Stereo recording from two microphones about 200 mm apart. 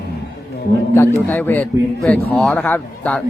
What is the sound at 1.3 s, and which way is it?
A man's voice, 10° left (ahead or behind).